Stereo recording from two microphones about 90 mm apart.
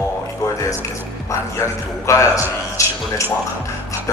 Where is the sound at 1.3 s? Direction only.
35° left (ahead or behind).